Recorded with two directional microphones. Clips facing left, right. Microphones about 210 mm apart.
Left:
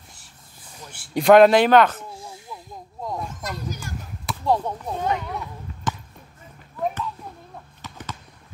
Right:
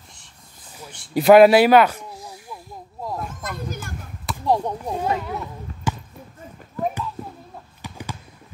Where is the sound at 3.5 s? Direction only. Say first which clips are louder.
Right 1 dB; 55° right (ahead or behind).